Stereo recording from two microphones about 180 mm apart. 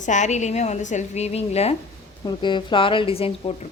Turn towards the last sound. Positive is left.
turn(degrees=30)  # may be behind; listen again after turning